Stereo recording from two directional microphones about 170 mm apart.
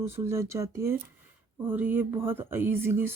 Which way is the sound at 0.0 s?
15° right (ahead or behind).